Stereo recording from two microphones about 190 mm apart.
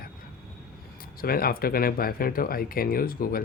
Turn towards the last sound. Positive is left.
turn(degrees=50)  # may be behind; listen again after turning